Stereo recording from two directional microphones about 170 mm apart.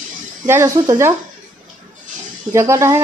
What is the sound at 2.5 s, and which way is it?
Speech, 15° right (ahead or behind).